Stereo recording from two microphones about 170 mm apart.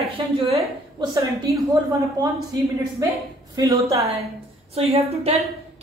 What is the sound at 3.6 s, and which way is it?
Speech, 20° right (ahead or behind).